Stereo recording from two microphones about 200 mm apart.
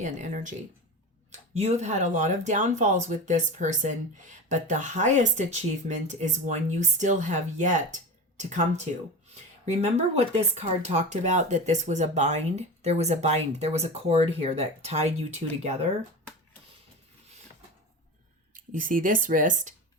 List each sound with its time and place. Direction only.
0.0 s speech: 40° right (ahead or behind)
18.5 s speech: 40° right (ahead or behind)